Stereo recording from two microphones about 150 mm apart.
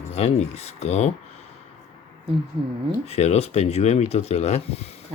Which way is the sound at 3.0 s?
45° left (ahead or behind).